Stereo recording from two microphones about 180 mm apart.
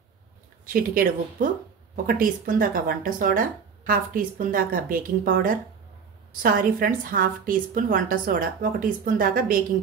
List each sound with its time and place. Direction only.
0.7 s speech: 55° right (ahead or behind)